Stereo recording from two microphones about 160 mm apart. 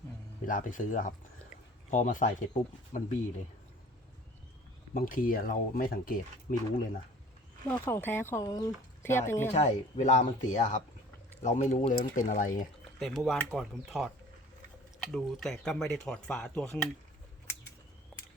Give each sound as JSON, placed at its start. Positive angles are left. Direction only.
{"t": 0.4, "sound": "speech", "side_deg": 55}
{"t": 4.9, "sound": "speech", "side_deg": 60}
{"t": 7.7, "sound": "speech", "side_deg": 15}
{"t": 9.6, "sound": "speech", "side_deg": 50}
{"t": 13.0, "sound": "speech", "side_deg": 0}
{"t": 15.1, "sound": "speech", "side_deg": 0}